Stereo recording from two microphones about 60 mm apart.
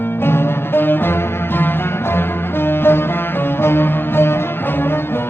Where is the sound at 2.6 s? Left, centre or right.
Left.